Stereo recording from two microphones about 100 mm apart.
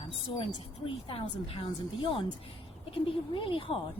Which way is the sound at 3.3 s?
60° left (ahead or behind).